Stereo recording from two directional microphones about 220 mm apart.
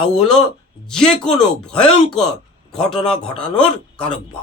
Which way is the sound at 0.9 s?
5° left (ahead or behind).